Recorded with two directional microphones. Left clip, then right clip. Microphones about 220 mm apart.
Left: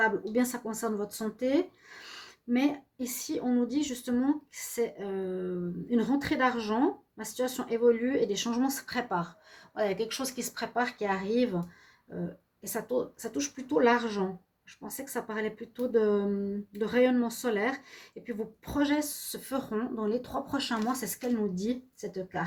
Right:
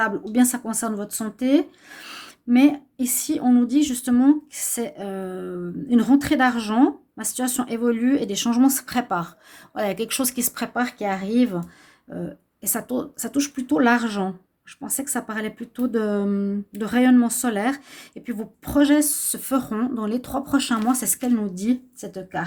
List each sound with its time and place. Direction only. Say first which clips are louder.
0.0 s speech: right 6 dB; 50° right (ahead or behind)
12.6 s speech: right 4 dB; 50° right (ahead or behind)